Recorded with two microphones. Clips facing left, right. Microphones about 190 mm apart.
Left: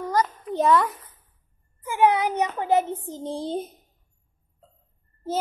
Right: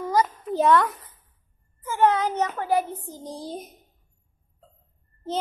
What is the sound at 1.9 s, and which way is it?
Speech, 15° left (ahead or behind).